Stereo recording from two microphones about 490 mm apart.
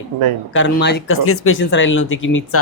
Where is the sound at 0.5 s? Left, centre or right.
Left.